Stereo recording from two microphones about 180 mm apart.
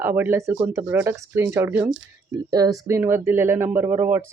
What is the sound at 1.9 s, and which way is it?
Speech, 90° right.